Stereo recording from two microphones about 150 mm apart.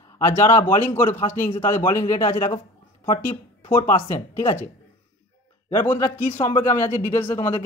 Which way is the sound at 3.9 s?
15° left (ahead or behind).